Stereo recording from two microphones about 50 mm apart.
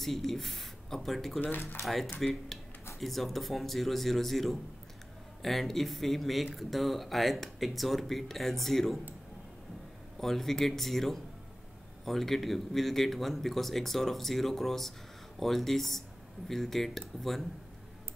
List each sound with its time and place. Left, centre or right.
0.0 s speech: centre
1.4 s speech: left
1.8 s speech: centre
10.2 s speech: centre